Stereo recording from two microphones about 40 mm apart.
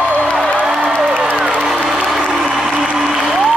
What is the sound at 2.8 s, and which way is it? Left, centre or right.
Applause, centre.